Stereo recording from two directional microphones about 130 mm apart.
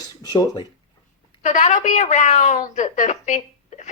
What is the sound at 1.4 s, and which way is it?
Speech, 60° left (ahead or behind).